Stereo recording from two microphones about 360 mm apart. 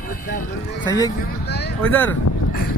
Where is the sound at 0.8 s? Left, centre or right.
Centre.